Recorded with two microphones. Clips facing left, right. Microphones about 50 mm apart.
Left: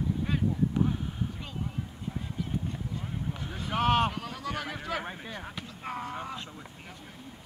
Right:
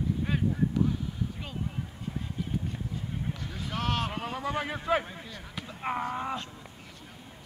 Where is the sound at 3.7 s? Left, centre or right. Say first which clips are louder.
Left 6 dB; left.